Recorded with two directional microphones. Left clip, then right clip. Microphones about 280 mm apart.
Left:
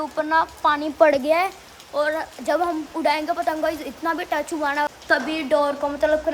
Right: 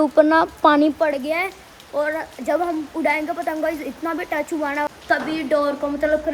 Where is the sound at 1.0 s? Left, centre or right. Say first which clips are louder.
Left 4 dB; left.